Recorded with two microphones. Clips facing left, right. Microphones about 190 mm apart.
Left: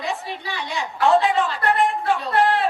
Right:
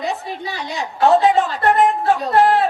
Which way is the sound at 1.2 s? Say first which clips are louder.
Right 5 dB; 40° right (ahead or behind).